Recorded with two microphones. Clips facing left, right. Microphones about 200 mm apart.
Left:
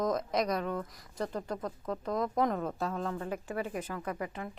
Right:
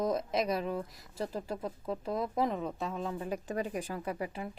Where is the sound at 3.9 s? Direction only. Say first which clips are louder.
Even; 30° right (ahead or behind).